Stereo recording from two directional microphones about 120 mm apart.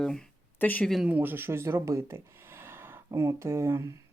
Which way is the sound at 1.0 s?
15° right (ahead or behind).